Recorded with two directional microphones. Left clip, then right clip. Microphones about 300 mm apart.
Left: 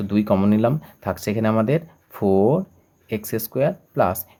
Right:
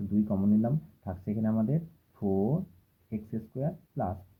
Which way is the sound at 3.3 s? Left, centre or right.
Left.